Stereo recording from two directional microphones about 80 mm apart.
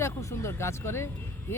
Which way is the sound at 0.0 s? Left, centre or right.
Left.